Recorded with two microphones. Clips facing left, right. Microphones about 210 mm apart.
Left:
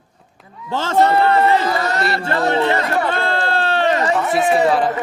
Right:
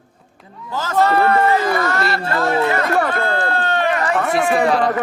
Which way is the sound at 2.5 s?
30° left (ahead or behind).